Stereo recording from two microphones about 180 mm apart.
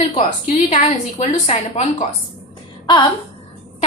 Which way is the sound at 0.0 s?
35° left (ahead or behind).